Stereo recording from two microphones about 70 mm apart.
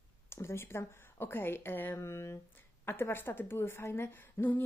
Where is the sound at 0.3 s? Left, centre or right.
Left.